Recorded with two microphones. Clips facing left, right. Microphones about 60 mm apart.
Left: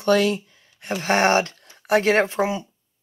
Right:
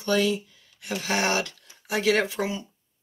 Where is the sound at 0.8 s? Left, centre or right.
Left.